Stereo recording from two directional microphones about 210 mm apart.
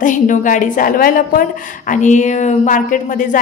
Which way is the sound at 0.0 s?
40° left (ahead or behind).